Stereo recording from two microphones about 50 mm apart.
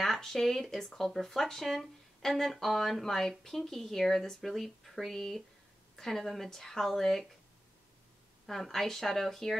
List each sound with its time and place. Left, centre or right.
0.0 s speech: centre
8.5 s speech: centre